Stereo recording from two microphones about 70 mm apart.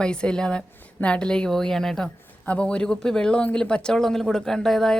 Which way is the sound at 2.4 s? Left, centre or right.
Centre.